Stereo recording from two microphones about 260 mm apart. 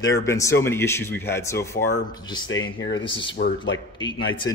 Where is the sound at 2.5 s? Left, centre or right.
Left.